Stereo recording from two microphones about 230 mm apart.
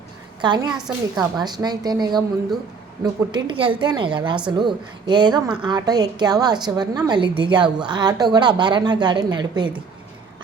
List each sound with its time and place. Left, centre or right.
0.4 s a woman's voice: centre